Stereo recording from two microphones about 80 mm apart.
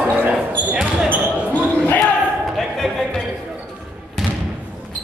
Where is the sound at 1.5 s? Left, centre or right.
Left.